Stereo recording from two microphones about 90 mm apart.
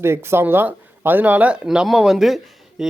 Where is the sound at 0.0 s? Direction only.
30° right (ahead or behind).